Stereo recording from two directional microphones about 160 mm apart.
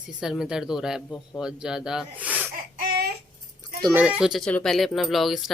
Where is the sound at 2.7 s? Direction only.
65° right (ahead or behind).